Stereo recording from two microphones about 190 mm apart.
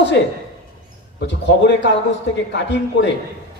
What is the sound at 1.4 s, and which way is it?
A man's voice, 65° left (ahead or behind).